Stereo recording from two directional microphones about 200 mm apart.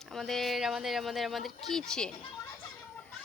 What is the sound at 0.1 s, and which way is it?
Speech, centre (ahead or behind).